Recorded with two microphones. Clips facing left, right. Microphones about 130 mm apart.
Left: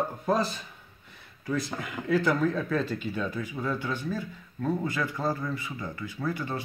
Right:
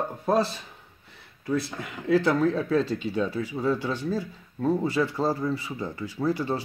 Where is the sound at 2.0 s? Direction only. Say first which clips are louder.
Right 3 dB; 30° right (ahead or behind).